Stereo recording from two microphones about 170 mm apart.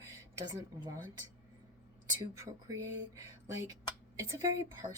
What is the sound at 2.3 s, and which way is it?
Speech, 20° right (ahead or behind).